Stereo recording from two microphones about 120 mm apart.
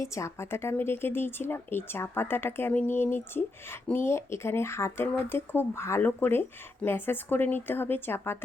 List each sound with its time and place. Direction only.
0.0 s speech: 25° left (ahead or behind)